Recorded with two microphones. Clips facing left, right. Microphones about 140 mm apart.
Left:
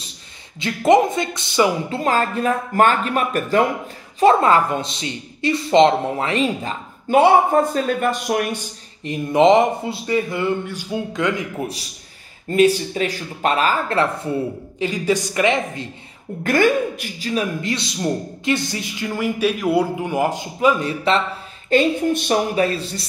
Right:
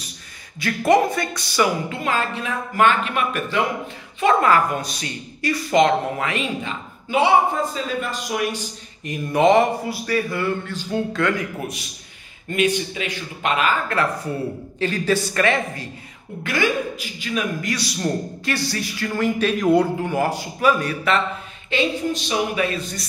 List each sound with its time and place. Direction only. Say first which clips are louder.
0.6 s speech: left 2 dB; 20° left (ahead or behind)
1.9 s a woman's voice: left 4 dB; 40° left (ahead or behind)
9.0 s speech: left 3 dB; 25° left (ahead or behind)
12.4 s a woman's voice: left 5 dB; 35° left (ahead or behind)
14.8 s speech: left 1 dB; 15° left (ahead or behind)
16.4 s a woman's voice: left 5 dB; 50° left (ahead or behind)
17.3 s speech: left 2 dB; 30° left (ahead or behind)
21.6 s a woman's voice: left 5 dB; 50° left (ahead or behind)
22.6 s a woman's voice: left 4 dB; 35° left (ahead or behind)